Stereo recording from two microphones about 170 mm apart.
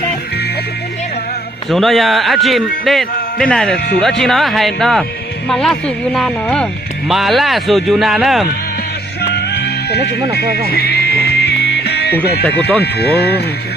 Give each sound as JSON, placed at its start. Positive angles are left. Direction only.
{"t": 1.7, "sound": "speech", "side_deg": 0}
{"t": 9.3, "sound": "music", "side_deg": 80}
{"t": 12.8, "sound": "speech", "side_deg": 70}